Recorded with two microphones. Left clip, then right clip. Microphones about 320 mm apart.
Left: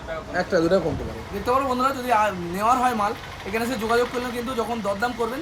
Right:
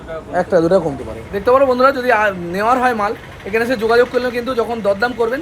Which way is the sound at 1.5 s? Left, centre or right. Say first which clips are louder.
Right 10 dB; centre.